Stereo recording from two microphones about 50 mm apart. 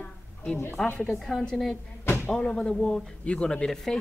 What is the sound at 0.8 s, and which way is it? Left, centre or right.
Speech, centre.